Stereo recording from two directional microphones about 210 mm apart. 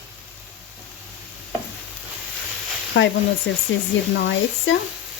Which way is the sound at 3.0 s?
65° left (ahead or behind).